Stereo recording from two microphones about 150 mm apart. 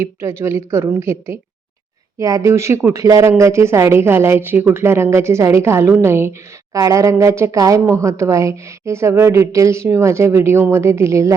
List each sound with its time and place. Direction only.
0.0 s speech: 15° right (ahead or behind)